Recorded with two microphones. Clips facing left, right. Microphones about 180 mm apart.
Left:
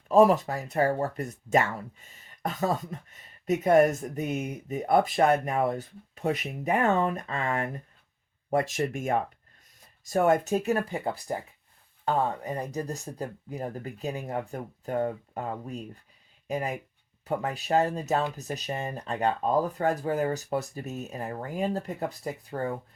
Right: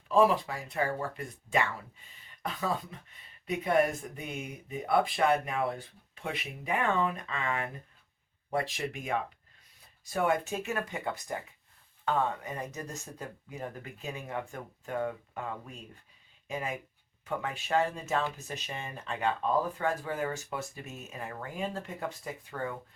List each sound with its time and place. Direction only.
0.1 s speech: 45° left (ahead or behind)